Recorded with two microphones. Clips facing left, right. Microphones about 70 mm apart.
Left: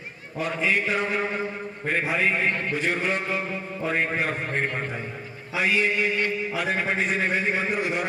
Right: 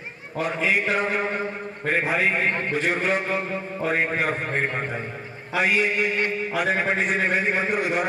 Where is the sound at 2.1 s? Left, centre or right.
Centre.